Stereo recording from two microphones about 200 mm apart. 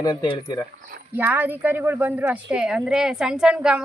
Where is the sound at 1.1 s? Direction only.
10° right (ahead or behind).